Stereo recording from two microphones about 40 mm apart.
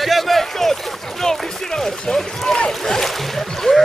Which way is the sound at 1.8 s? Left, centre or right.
Centre.